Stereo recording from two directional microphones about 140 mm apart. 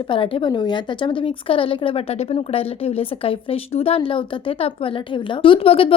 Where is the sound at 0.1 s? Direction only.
40° left (ahead or behind).